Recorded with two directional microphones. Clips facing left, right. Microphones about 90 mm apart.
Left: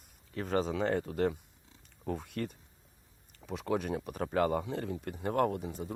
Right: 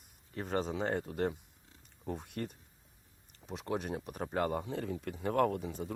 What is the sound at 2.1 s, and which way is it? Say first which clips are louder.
Speech: left 3 dB; 90° left.